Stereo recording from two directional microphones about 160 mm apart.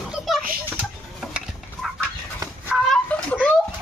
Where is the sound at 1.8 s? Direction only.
Centre (ahead or behind).